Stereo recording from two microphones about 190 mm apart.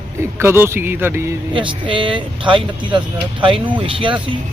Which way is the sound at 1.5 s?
25° right (ahead or behind).